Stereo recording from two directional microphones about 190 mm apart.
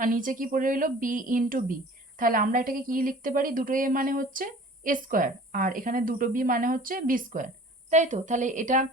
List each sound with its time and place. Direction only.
0.0 s a woman's voice: 45° right (ahead or behind)